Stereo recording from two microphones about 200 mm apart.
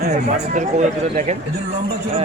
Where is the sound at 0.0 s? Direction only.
40° right (ahead or behind).